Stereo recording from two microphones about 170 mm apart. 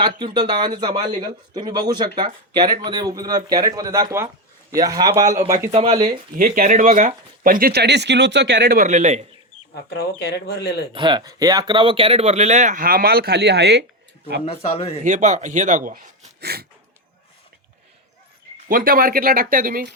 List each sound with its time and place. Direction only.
0.0 s speech: 25° right (ahead or behind)
5.7 s speech: 35° right (ahead or behind)
6.3 s speech: 55° right (ahead or behind); by 8.8 s 85° right
8.8 s speech: 45° right (ahead or behind)
9.9 s speech: 70° left (ahead or behind)
10.9 s speech: 25° right (ahead or behind); by 13.8 s 75° right (ahead or behind)
14.4 s speech: 35° left (ahead or behind)
15.0 s speech: 45° right (ahead or behind); by 16.6 s 65° right (ahead or behind)
18.7 s speech: 55° right (ahead or behind)